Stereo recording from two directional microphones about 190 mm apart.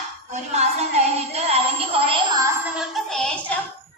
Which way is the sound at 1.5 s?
30° right (ahead or behind).